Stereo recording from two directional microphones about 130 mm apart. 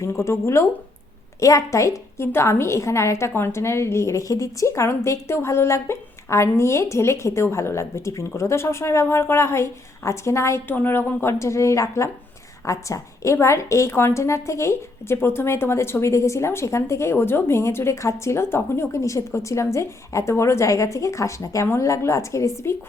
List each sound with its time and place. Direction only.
0.0 s a woman's voice: 20° left (ahead or behind)